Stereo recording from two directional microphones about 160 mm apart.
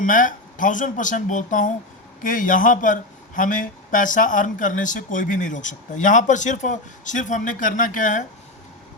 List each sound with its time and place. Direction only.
0.0 s a man's voice: 55° left (ahead or behind)